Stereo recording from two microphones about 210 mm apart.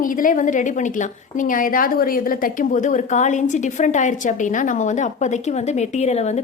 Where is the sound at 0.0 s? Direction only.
40° left (ahead or behind).